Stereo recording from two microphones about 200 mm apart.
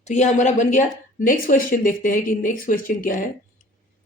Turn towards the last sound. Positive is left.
turn(degrees=45)  # may be behind; listen again after turning